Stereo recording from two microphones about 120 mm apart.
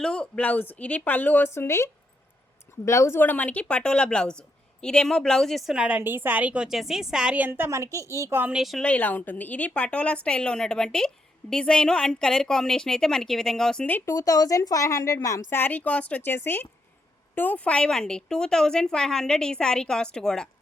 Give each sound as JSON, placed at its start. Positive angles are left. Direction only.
{"t": 0.0, "sound": "a woman's voice", "side_deg": 5}
{"t": 8.5, "sound": "speech", "side_deg": 0}
{"t": 8.8, "sound": "a woman's voice", "side_deg": 10}
{"t": 14.1, "sound": "a woman's voice", "side_deg": 30}